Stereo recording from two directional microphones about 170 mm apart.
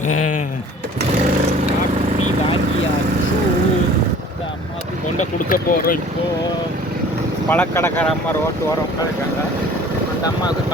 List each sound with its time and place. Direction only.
5.2 s speech: 55° left (ahead or behind)
7.5 s speech: 10° left (ahead or behind)